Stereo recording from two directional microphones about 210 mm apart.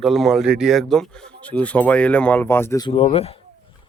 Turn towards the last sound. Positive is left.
turn(degrees=30)  # may be behind; listen again after turning